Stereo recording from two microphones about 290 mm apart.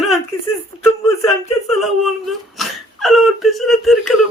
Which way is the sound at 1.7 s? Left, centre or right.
Centre.